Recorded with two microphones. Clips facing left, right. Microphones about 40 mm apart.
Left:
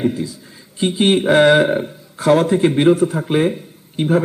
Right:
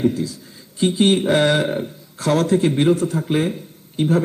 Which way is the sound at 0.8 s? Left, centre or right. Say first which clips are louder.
Left 1 dB; centre.